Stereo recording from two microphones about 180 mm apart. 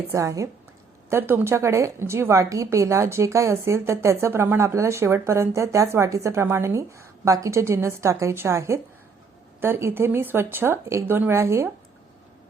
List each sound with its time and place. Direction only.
0.1 s a woman's voice: 15° right (ahead or behind)